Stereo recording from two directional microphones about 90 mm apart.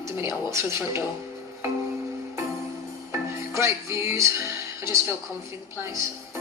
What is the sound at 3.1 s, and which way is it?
Music, 30° right (ahead or behind).